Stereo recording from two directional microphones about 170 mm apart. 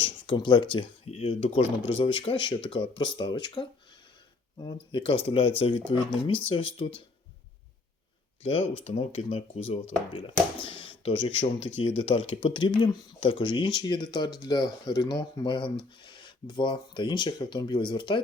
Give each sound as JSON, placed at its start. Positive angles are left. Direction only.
{"t": 0.0, "sound": "speech", "side_deg": 30}
{"t": 8.8, "sound": "speech", "side_deg": 40}